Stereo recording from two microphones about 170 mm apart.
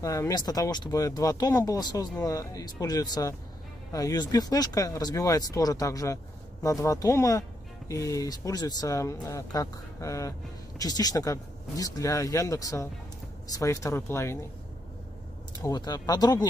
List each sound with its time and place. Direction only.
0.0 s speech: 20° left (ahead or behind)
15.6 s speech: 20° left (ahead or behind)